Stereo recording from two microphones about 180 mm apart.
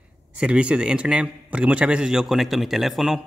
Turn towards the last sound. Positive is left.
turn(degrees=0)  # may be behind; listen again after turning